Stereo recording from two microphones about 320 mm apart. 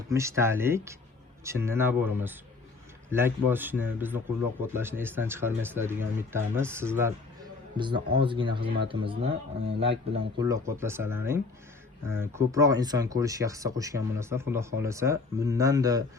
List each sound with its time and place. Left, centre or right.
0.1 s speech: centre